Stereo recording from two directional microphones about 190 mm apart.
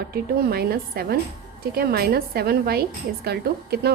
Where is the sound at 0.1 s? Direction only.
55° right (ahead or behind).